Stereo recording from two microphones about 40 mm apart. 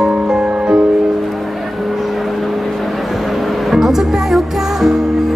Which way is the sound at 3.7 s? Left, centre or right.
Centre.